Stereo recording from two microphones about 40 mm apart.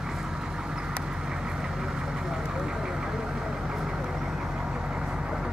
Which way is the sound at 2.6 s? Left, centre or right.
Centre.